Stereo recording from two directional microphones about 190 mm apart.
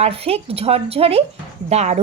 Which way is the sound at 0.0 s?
30° right (ahead or behind).